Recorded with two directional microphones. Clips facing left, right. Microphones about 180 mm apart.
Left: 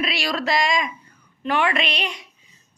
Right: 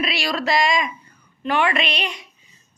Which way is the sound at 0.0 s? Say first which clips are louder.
Right 1 dB; centre (ahead or behind).